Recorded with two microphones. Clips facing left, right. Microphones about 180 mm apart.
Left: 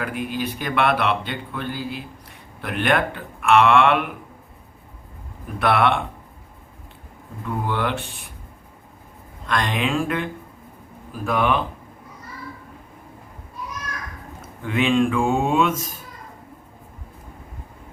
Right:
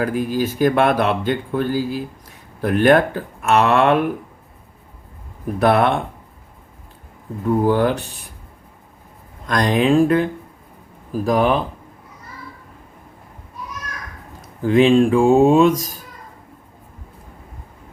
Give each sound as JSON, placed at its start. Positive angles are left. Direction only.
{"t": 0.0, "sound": "speech", "side_deg": -40}
{"t": 5.5, "sound": "speech", "side_deg": -40}
{"t": 7.4, "sound": "speech", "side_deg": -40}
{"t": 9.5, "sound": "speech", "side_deg": -40}
{"t": 14.6, "sound": "speech", "side_deg": -35}